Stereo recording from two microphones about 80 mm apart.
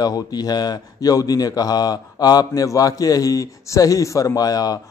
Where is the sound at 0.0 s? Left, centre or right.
Left.